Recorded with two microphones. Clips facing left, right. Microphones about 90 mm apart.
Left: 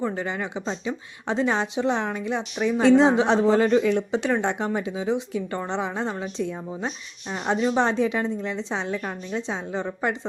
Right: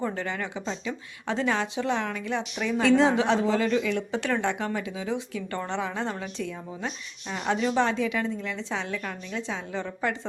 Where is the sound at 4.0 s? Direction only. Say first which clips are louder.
Left 4 dB; 20° left (ahead or behind).